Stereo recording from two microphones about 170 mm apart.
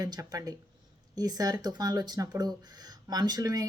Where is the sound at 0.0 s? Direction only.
20° right (ahead or behind).